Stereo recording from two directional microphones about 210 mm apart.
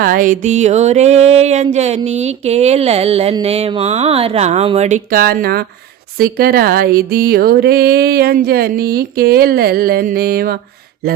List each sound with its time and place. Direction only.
0.0 s speech: 40° right (ahead or behind)